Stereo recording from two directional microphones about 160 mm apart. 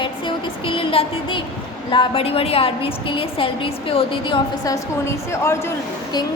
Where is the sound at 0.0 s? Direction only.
35° left (ahead or behind).